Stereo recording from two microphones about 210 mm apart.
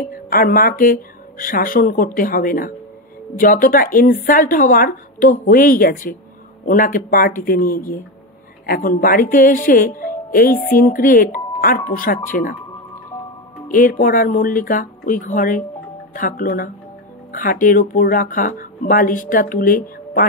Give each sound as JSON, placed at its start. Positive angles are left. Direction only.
{"t": 0.1, "sound": "speech", "side_deg": 40}
{"t": 13.7, "sound": "speech", "side_deg": 40}